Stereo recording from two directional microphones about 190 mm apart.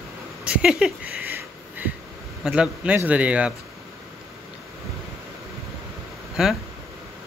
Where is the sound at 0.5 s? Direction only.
5° right (ahead or behind).